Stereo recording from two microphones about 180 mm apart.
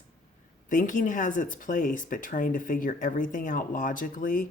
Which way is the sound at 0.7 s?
45° left (ahead or behind).